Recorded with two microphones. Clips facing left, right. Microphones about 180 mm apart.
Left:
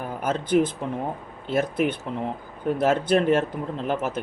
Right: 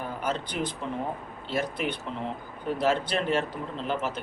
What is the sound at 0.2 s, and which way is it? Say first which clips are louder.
Speech: left 11 dB; 50° left (ahead or behind).